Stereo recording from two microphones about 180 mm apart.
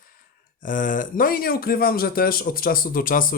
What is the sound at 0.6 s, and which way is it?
Speech, 45° left (ahead or behind).